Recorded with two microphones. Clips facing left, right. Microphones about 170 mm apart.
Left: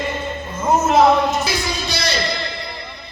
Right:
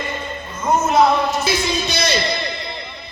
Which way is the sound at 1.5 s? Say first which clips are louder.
Right 3 dB; 20° right (ahead or behind).